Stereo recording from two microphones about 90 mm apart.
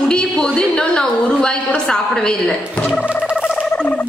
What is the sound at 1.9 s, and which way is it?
Speech, 10° left (ahead or behind).